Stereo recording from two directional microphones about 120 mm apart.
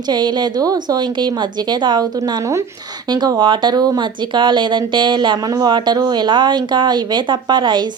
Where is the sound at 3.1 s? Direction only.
35° right (ahead or behind).